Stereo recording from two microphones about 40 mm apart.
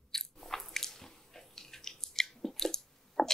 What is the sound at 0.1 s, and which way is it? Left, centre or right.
Biting, centre.